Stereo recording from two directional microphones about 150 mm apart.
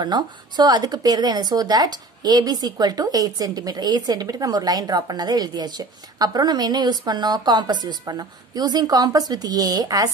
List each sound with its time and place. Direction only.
0.0 s speech: 30° right (ahead or behind)